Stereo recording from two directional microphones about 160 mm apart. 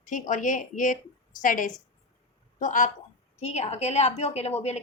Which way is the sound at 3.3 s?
40° left (ahead or behind).